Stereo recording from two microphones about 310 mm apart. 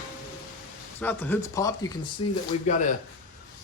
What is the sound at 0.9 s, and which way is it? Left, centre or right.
Speech, centre.